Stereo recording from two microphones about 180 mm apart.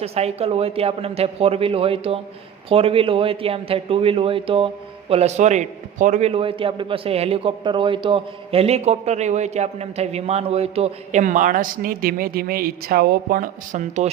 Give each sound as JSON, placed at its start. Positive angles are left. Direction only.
{"t": 0.0, "sound": "a man's voice", "side_deg": -35}